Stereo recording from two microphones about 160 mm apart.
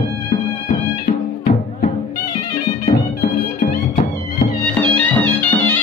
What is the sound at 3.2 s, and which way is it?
Music, 40° left (ahead or behind).